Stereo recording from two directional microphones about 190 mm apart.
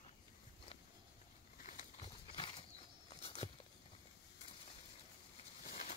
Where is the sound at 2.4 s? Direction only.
25° left (ahead or behind).